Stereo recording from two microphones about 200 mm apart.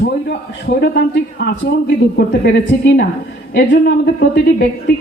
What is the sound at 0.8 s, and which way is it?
A man's voice, 50° left (ahead or behind).